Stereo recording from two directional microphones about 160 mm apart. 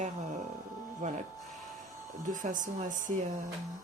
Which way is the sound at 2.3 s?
55° right (ahead or behind).